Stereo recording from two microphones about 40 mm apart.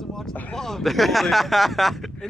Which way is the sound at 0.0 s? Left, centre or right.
Centre.